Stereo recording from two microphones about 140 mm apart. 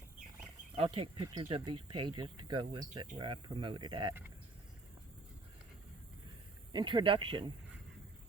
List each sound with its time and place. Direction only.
0.8 s speech: 40° right (ahead or behind)
6.7 s speech: 35° right (ahead or behind)